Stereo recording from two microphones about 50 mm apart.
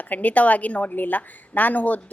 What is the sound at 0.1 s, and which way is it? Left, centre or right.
A woman's voice, left.